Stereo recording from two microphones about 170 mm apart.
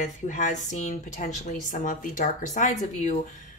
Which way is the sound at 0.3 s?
45° left (ahead or behind).